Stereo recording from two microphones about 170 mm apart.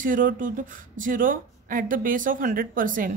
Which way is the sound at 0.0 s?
55° right (ahead or behind).